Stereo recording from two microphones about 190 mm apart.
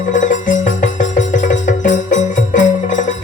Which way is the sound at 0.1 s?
45° left (ahead or behind).